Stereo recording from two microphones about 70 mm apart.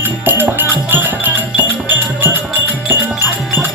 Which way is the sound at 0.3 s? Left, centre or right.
Right.